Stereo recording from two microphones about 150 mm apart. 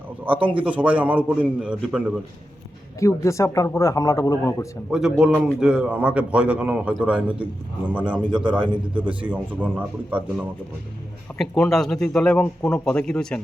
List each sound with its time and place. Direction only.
0.5 s a man's voice: 10° right (ahead or behind)
3.0 s speech: 20° left (ahead or behind)
4.9 s a man's voice: 5° right (ahead or behind)
8.2 s a man's voice: 30° right (ahead or behind)
9.0 s a man's voice: 10° right (ahead or behind)
11.3 s a man's voice: 5° left (ahead or behind)